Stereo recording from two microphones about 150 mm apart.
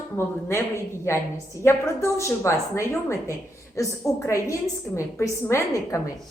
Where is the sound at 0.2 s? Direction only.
15° left (ahead or behind).